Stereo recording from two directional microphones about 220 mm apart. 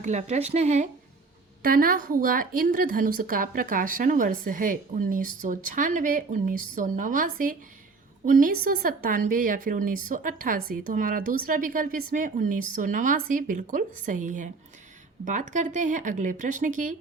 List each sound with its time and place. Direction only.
0.0 s a woman's voice: 30° right (ahead or behind)